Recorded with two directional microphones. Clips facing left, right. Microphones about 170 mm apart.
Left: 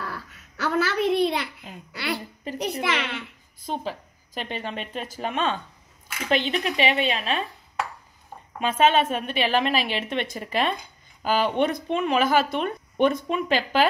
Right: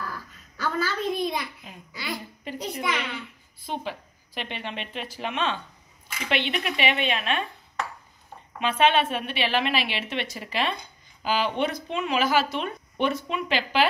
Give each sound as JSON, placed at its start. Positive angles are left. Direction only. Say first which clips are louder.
{"t": 0.0, "sound": "a sound", "louder": "left 1 dB", "side_deg": 70}
{"t": 2.8, "sound": "a child's voice", "louder": "left 2 dB", "side_deg": 70}
{"t": 3.5, "sound": "a woman's voice", "louder": "left 2 dB", "side_deg": 40}
{"t": 8.5, "sound": "a woman's voice", "louder": "left 2 dB", "side_deg": 45}